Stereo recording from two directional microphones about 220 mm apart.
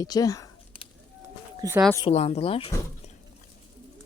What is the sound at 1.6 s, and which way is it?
Speech, 15° right (ahead or behind).